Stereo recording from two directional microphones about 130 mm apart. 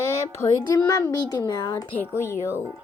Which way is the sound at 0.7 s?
30° left (ahead or behind).